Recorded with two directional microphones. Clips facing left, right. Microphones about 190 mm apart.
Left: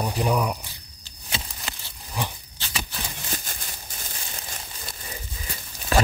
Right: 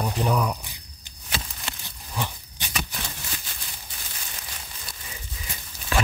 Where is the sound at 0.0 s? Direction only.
10° left (ahead or behind).